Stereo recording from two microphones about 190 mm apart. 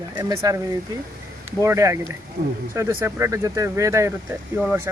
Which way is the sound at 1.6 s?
15° right (ahead or behind).